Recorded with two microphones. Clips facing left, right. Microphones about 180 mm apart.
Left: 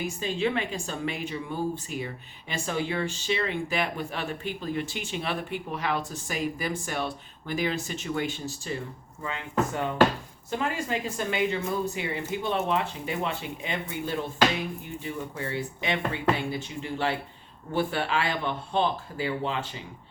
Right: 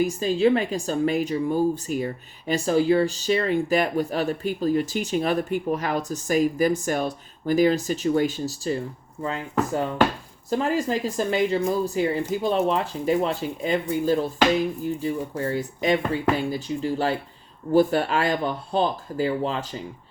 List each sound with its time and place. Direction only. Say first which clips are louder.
0.0 s a woman's voice: right 8 dB; 40° right (ahead or behind)